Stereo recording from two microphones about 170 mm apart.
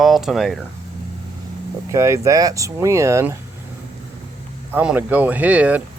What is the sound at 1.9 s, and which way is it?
Speech, 15° right (ahead or behind).